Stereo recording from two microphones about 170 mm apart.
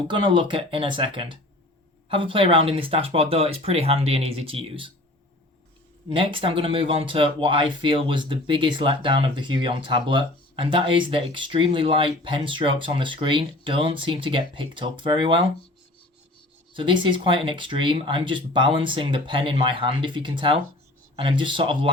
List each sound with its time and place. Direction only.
0.1 s speech: 30° right (ahead or behind)
6.1 s speech: 30° right (ahead or behind)
16.7 s speech: 30° right (ahead or behind)